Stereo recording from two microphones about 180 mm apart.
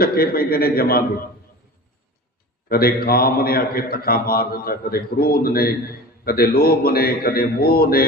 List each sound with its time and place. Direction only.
0.0 s a man's voice: 55° left (ahead or behind)
2.6 s a man's voice: 55° left (ahead or behind)